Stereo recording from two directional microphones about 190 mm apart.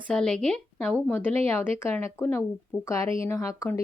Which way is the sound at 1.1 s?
10° left (ahead or behind).